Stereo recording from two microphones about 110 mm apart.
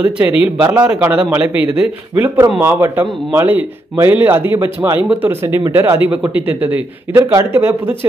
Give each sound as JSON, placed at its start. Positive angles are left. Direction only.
{"t": 0.0, "sound": "a man's voice", "side_deg": -15}